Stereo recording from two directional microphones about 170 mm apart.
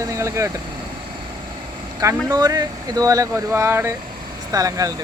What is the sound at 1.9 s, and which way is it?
Speech, 20° right (ahead or behind).